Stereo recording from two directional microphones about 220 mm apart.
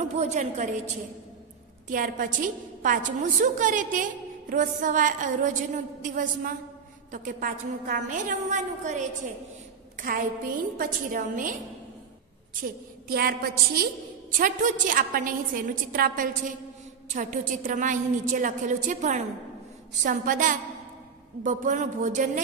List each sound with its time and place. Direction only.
0.0 s a woman's voice: 30° right (ahead or behind)
1.9 s a woman's voice: 35° right (ahead or behind)
12.6 s a woman's voice: 45° right (ahead or behind)